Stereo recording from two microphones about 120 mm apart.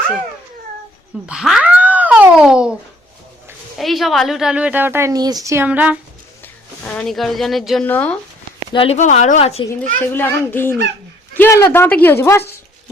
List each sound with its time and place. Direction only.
1.3 s speech: 5° right (ahead or behind)
3.8 s a woman's voice: centre (ahead or behind); by 5.1 s 20° right (ahead or behind)
5.1 s a woman's voice: 35° right (ahead or behind)
5.6 s speech: 15° right (ahead or behind)
6.4 s speech: 10° left (ahead or behind)
7.9 s a child's voice: 15° left (ahead or behind)
8.7 s speech: 50° left (ahead or behind)
9.0 s speech: 90° left
9.4 s a child's voice: 55° left (ahead or behind)
10.0 s a child's voice: 15° left (ahead or behind)